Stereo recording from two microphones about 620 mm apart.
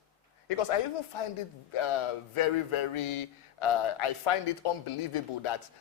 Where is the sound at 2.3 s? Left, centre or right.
Left.